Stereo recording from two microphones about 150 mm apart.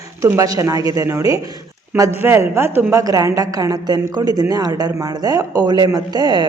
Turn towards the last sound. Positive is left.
turn(degrees=-25)  # may be behind; listen again after turning